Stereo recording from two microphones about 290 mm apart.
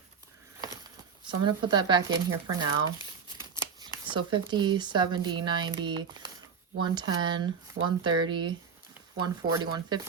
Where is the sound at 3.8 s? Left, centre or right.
Centre.